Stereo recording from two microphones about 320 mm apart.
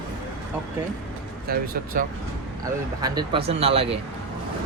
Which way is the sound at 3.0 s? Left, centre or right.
Centre.